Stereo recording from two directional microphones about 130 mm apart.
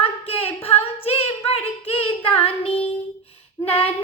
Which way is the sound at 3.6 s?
20° left (ahead or behind).